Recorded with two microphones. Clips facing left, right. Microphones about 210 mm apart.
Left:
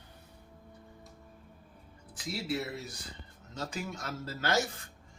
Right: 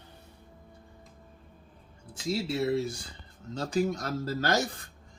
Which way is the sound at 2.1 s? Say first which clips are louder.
Right 4 dB; 25° right (ahead or behind).